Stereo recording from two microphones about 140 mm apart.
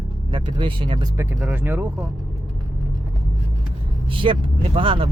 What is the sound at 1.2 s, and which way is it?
Speech, 10° right (ahead or behind).